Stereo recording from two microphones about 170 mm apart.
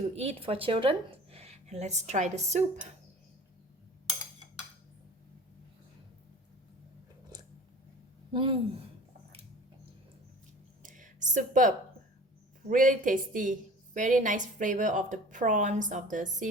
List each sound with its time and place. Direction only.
0.2 s speech: 35° right (ahead or behind)
8.3 s speech: 30° right (ahead or behind)
10.8 s a sound: 50° right (ahead or behind)
12.6 s a woman's voice: 50° right (ahead or behind)